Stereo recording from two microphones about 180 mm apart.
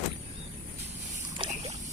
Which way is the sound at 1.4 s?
25° right (ahead or behind).